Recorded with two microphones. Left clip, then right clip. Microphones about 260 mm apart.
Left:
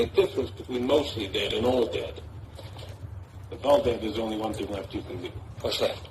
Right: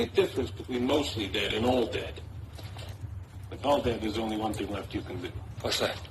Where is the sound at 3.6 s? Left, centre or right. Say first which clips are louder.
Left 5 dB; right.